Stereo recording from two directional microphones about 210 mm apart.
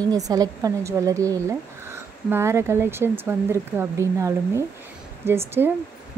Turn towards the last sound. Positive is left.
turn(degrees=-10)  # may be behind; listen again after turning